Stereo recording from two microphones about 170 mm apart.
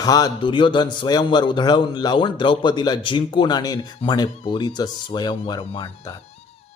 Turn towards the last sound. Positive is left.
turn(degrees=30)  # may be behind; listen again after turning